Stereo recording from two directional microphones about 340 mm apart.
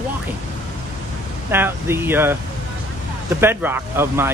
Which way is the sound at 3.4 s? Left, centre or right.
Centre.